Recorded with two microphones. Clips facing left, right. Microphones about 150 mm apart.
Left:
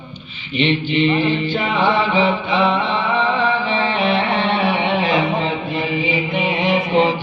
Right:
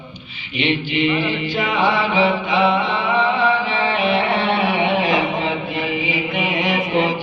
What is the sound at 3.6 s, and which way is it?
Mantra, 30° left (ahead or behind).